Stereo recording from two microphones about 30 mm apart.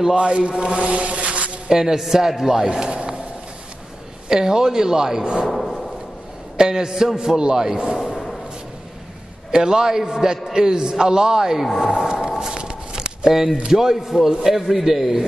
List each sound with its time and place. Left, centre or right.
0.2 s rub: right
0.8 s a sound: right
1.7 s a man's voice: centre
4.3 s a man's voice: right
5.2 s rub: right
5.5 s rub: centre
6.5 s a man's voice: right
7.9 s a sound: centre
9.5 s a man's voice: right
12.3 s walk: right
13.2 s a man's voice: centre